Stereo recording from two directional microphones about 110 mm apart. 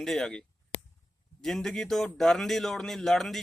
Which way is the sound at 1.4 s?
5° left (ahead or behind).